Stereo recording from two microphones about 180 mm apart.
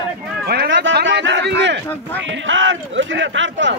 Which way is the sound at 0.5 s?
65° right (ahead or behind).